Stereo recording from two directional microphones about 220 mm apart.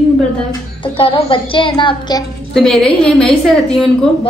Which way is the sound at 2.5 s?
Centre (ahead or behind).